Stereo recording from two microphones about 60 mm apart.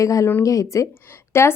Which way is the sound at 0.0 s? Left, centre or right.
Left.